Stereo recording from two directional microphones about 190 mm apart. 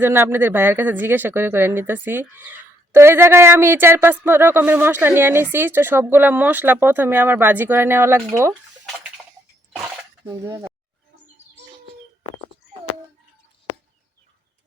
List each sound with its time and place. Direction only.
0.0 s a woman's voice: 10° right (ahead or behind)
10.2 s a woman's voice: 20° right (ahead or behind)